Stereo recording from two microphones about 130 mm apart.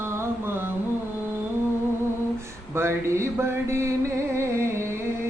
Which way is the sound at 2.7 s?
20° right (ahead or behind).